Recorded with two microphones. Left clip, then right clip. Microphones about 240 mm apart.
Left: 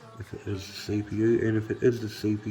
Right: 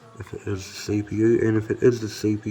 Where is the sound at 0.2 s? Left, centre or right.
Centre.